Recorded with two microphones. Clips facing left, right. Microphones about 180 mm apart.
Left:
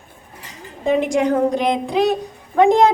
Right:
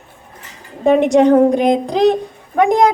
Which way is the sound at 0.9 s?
65° right (ahead or behind).